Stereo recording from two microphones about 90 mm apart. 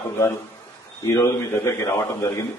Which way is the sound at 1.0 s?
35° left (ahead or behind).